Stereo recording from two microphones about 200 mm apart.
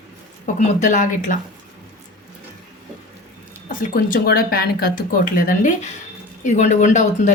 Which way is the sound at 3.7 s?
45° left (ahead or behind).